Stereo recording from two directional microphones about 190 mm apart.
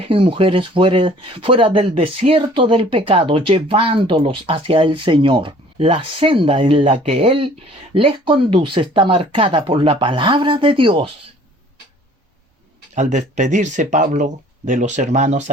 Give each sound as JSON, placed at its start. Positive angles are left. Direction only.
{"t": 0.1, "sound": "speech", "side_deg": -25}
{"t": 13.0, "sound": "speech", "side_deg": -40}